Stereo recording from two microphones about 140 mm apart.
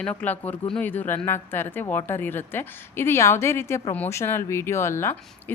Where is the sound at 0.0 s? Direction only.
10° left (ahead or behind).